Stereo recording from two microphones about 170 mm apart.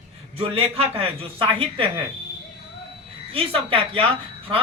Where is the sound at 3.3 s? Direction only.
35° right (ahead or behind).